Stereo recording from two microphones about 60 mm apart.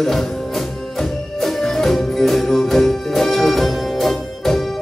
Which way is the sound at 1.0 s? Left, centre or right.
Centre.